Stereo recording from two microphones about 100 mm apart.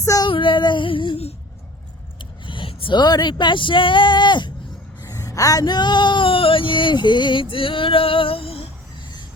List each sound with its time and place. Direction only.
0.0 s child singing: 35° left (ahead or behind)
0.3 s female singing: 55° left (ahead or behind)
2.1 s speech: 55° left (ahead or behind)
5.0 s a sound: 35° left (ahead or behind); by 7.4 s 50° left (ahead or behind)
7.5 s female singing: 60° left (ahead or behind)